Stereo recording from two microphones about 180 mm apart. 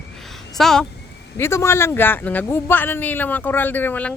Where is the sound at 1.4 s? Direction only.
15° left (ahead or behind).